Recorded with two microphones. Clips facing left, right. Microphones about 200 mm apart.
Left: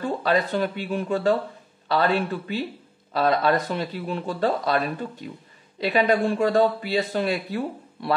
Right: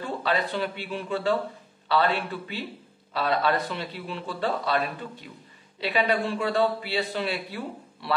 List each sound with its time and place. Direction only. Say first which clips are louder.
0.2 s speech: left 4 dB; 45° left (ahead or behind)